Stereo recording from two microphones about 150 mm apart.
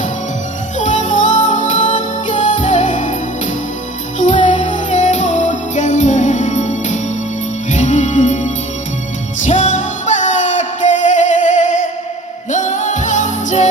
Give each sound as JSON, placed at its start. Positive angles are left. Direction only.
{"t": 0.8, "sound": "music", "side_deg": 55}
{"t": 4.2, "sound": "music", "side_deg": 55}